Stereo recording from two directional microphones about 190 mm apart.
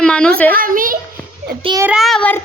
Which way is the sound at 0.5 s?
45° right (ahead or behind).